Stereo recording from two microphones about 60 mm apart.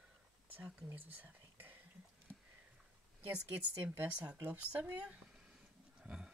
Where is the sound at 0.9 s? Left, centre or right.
Right.